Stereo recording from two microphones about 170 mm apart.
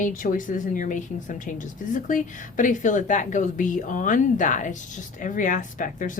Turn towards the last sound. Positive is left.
turn(degrees=50)  # may be behind; listen again after turning